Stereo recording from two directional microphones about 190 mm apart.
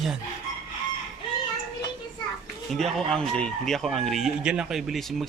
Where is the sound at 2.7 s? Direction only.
Centre (ahead or behind).